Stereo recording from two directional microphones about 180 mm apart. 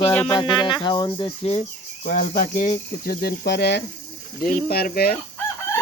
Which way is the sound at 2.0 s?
45° left (ahead or behind).